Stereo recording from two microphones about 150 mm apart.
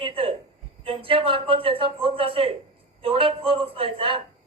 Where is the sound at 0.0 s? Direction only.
35° right (ahead or behind).